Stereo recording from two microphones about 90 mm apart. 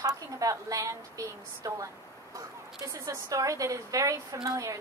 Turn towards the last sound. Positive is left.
turn(degrees=-40)  # may be behind; listen again after turning